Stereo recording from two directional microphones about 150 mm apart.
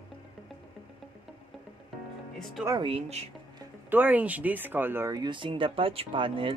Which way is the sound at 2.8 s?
40° right (ahead or behind).